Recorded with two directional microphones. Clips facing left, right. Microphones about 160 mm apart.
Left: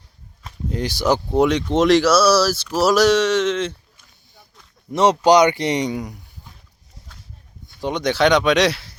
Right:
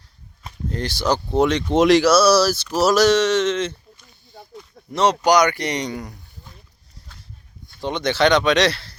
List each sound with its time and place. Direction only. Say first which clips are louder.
0.7 s speech: left 2 dB; 10° left (ahead or behind)
1.3 s speech: right 2 dB; centre (ahead or behind)
4.9 s speech: left 3 dB; 20° left (ahead or behind)
7.8 s speech: left 1 dB; 5° left (ahead or behind)